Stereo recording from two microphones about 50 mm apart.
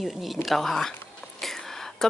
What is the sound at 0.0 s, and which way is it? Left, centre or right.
A woman's voice, centre.